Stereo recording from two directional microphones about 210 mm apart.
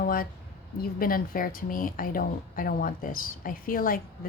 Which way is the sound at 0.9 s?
45° left (ahead or behind).